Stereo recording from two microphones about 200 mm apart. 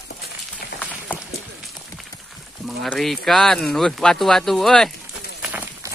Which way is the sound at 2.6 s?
Centre (ahead or behind).